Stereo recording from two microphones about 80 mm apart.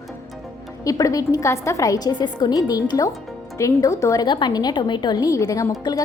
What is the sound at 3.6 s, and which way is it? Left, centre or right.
Speech, left.